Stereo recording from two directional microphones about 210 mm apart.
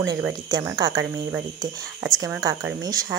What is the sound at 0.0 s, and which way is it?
Speech, 15° right (ahead or behind).